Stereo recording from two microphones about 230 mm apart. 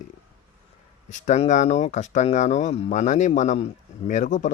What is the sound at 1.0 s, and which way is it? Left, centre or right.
Speech, left.